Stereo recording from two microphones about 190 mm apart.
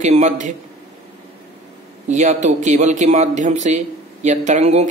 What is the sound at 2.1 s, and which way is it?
Speech, 40° right (ahead or behind).